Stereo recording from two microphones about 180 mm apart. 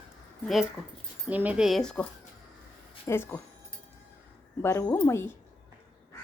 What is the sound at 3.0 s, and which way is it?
Speech, 15° left (ahead or behind).